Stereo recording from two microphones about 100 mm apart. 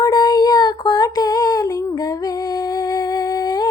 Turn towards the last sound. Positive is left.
turn(degrees=45)  # may be behind; listen again after turning